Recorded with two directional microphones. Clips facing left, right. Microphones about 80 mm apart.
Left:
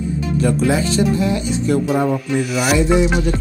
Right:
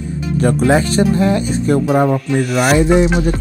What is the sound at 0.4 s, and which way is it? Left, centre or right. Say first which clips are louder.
Speech: right 4 dB; right.